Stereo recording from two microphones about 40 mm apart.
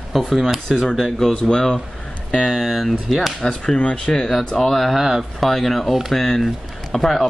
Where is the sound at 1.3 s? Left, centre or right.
Centre.